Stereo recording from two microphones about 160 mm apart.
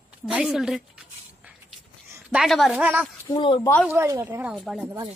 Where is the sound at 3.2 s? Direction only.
30° left (ahead or behind).